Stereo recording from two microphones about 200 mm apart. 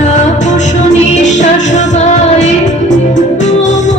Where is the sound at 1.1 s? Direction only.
35° left (ahead or behind).